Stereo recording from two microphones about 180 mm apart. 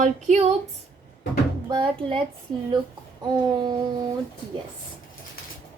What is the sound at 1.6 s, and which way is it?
Speech, 30° right (ahead or behind).